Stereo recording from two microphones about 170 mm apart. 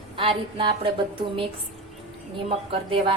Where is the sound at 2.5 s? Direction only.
35° right (ahead or behind).